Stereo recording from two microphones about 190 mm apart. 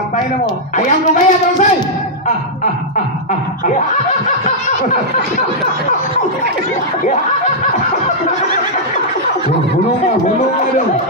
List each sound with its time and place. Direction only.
0.7 s a man's voice: 40° left (ahead or behind)